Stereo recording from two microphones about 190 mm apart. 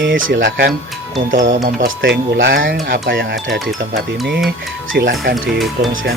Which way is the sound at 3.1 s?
60° right (ahead or behind).